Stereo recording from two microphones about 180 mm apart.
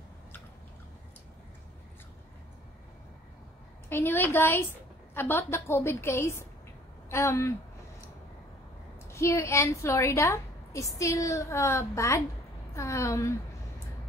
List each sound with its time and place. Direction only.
3.9 s a woman's voice: 10° left (ahead or behind)
9.1 s a woman's voice: 15° left (ahead or behind)